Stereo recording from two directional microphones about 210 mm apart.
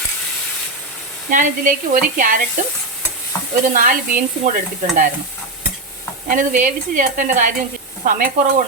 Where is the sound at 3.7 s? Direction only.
40° right (ahead or behind).